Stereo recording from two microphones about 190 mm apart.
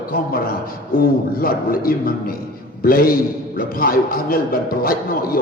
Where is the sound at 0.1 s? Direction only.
50° left (ahead or behind).